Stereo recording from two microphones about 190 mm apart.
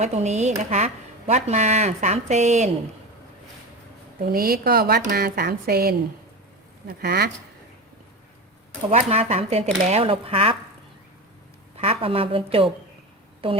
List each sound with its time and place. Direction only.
0.0 s speech: 35° right (ahead or behind)
4.2 s speech: 50° right (ahead or behind)
8.9 s a woman's voice: 35° right (ahead or behind)
11.8 s a woman's voice: 30° right (ahead or behind)